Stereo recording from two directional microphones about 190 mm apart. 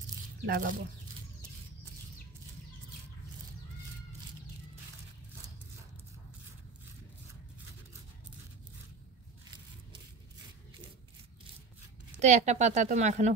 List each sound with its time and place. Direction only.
0.5 s speech: 45° right (ahead or behind)
12.2 s a woman's voice: 35° right (ahead or behind)